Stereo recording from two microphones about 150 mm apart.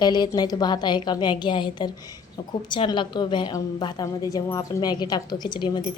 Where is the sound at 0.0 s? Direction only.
25° left (ahead or behind).